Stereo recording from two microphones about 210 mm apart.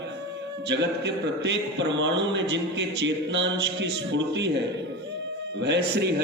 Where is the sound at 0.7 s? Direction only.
55° right (ahead or behind).